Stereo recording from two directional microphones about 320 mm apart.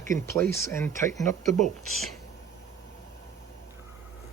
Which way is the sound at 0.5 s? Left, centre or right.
Centre.